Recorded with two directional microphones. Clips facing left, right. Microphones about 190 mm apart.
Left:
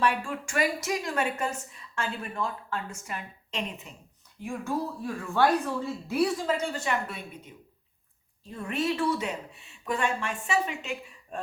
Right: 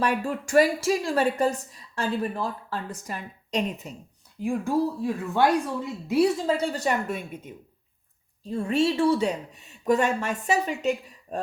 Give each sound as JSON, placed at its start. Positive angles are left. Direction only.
{"t": 0.0, "sound": "a woman's voice", "side_deg": -40}
{"t": 4.6, "sound": "a woman's voice", "side_deg": -20}
{"t": 6.6, "sound": "a woman's voice", "side_deg": -40}
{"t": 8.4, "sound": "a woman's voice", "side_deg": -30}